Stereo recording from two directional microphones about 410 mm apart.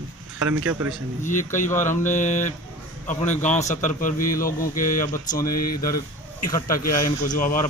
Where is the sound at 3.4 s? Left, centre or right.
Centre.